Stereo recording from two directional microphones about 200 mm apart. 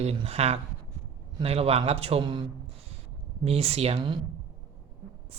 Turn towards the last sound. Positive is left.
turn(degrees=-25)  # may be behind; listen again after turning